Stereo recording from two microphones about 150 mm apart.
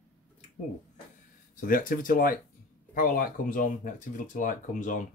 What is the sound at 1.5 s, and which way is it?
Speech, 65° left (ahead or behind).